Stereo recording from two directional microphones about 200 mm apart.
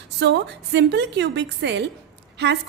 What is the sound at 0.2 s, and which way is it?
A woman's voice, 60° right (ahead or behind).